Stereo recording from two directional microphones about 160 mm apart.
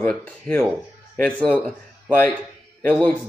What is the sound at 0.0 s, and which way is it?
Speech, 10° left (ahead or behind).